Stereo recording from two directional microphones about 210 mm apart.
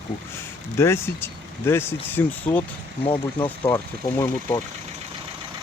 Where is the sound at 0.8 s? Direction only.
10° left (ahead or behind).